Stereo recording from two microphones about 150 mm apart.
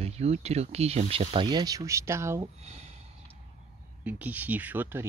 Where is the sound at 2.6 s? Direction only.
45° right (ahead or behind).